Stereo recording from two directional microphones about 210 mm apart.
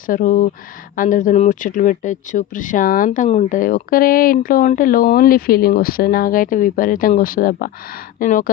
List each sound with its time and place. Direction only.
0.1 s speech: 40° left (ahead or behind)